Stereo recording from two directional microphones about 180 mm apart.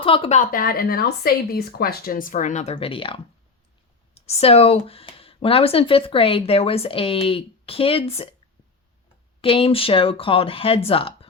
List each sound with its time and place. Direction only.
0.0 s speech: 30° left (ahead or behind)
9.4 s speech: 30° left (ahead or behind)